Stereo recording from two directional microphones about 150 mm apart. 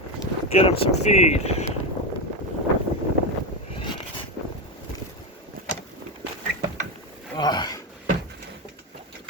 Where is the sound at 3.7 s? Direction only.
30° left (ahead or behind).